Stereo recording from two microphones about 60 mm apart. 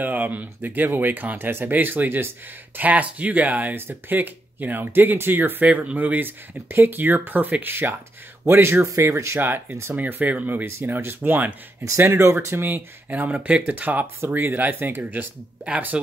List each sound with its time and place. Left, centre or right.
0.0 s speech: right
5.7 s speech: right
9.1 s speech: right
9.4 s speech: right
9.9 s speech: right
10.8 s speech: right
12.0 s speech: right
12.6 s speech: right
15.9 s speech: centre